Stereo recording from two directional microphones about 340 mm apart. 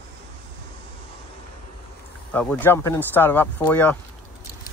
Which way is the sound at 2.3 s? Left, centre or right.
Centre.